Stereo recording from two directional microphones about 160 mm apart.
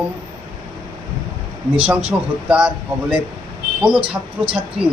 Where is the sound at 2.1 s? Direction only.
10° right (ahead or behind).